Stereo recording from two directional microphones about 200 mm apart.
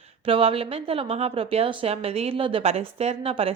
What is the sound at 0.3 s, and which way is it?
A woman's voice, 25° right (ahead or behind).